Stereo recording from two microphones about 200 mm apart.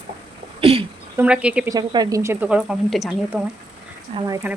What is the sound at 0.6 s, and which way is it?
Throat clearing, 30° right (ahead or behind).